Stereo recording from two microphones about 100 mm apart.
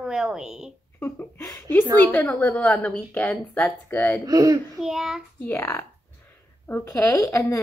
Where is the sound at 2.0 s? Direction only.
10° left (ahead or behind).